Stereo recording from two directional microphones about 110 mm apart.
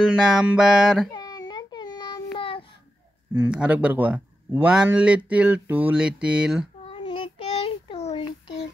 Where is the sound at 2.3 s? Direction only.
50° left (ahead or behind).